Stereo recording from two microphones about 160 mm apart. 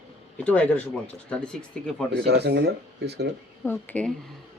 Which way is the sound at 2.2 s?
90° right.